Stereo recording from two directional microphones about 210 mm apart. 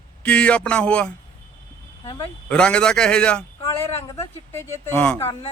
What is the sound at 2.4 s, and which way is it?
Speech, 5° left (ahead or behind).